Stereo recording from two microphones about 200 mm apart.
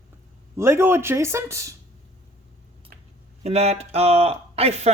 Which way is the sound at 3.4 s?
30° right (ahead or behind).